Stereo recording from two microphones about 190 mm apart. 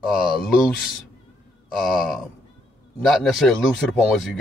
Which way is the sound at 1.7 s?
Centre (ahead or behind).